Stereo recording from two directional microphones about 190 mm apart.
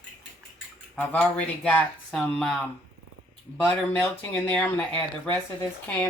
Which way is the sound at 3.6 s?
5° left (ahead or behind).